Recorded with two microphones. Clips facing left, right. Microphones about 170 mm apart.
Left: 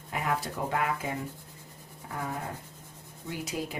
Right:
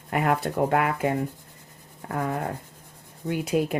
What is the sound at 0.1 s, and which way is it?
Speech, 65° right (ahead or behind).